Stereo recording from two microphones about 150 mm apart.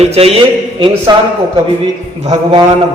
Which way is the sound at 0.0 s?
45° right (ahead or behind).